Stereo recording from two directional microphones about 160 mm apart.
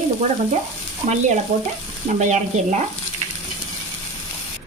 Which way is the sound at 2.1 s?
50° right (ahead or behind).